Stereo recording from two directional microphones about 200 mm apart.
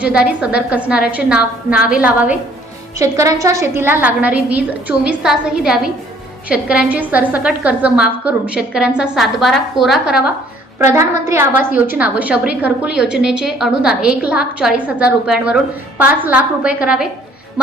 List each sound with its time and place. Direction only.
0.0 s a woman's voice: 5° right (ahead or behind)
11.3 s a woman's voice: 10° right (ahead or behind)